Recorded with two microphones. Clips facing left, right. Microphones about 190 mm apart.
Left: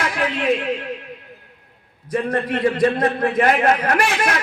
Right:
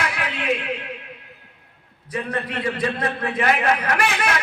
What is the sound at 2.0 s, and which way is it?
A man's voice, 45° left (ahead or behind).